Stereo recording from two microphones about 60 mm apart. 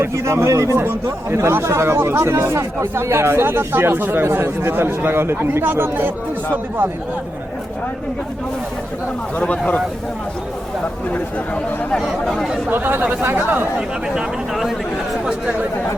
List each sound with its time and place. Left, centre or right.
0.0 s speech: right
0.8 s speech: right
9.4 s speech: centre
12.0 s speech: centre
12.7 s speech: right
13.7 s speech: centre